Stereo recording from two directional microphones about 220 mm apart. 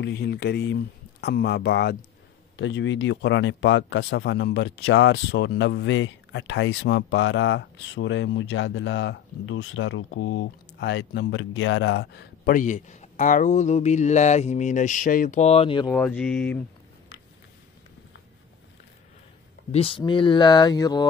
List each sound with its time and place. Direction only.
0.0 s speech: 45° left (ahead or behind); by 15.9 s 25° left (ahead or behind)
15.9 s speech: 5° left (ahead or behind)
19.7 s speech: 25° left (ahead or behind)